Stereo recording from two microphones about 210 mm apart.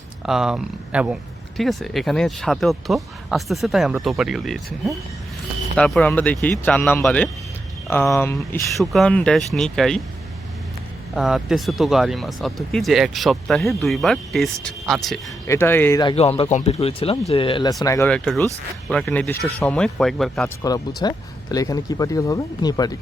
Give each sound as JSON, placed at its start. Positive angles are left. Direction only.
{"t": 0.3, "sound": "speech", "side_deg": 0}
{"t": 8.8, "sound": "speech", "side_deg": 0}
{"t": 11.1, "sound": "speech", "side_deg": 0}
{"t": 15.4, "sound": "speech", "side_deg": 10}
{"t": 16.1, "sound": "speech", "side_deg": 30}
{"t": 17.8, "sound": "speech", "side_deg": 10}
{"t": 20.6, "sound": "speech", "side_deg": 15}